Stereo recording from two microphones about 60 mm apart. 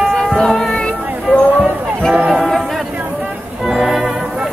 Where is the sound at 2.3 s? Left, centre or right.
Centre.